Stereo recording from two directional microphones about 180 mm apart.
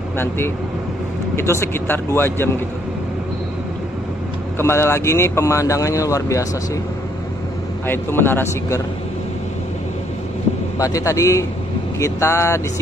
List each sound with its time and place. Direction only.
1.3 s speech: 15° left (ahead or behind)
4.6 s speech: 15° left (ahead or behind)
7.8 s speech: 10° left (ahead or behind)
10.8 s a man's voice: 20° left (ahead or behind)